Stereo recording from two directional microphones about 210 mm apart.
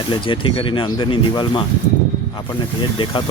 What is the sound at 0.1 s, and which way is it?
Speech, 25° left (ahead or behind).